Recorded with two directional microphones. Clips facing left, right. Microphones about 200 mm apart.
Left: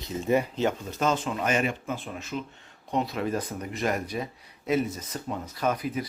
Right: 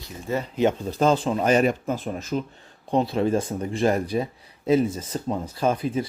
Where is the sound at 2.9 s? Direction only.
30° right (ahead or behind).